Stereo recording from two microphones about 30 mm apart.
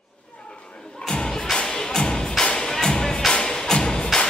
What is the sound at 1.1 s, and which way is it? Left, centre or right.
Music, left.